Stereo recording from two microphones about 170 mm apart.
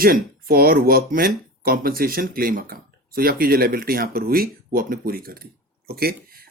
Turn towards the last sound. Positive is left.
turn(degrees=-65)  # may be behind; listen again after turning